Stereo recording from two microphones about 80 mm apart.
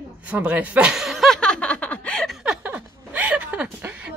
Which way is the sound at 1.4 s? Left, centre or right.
Centre.